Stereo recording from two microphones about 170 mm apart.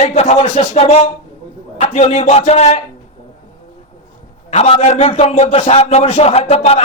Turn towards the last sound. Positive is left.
turn(degrees=40)  # may be behind; listen again after turning